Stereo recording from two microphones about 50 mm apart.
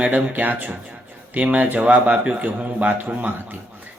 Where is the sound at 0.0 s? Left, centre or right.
Right.